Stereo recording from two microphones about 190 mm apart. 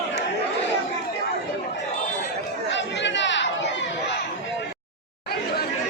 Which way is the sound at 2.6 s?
70° left (ahead or behind).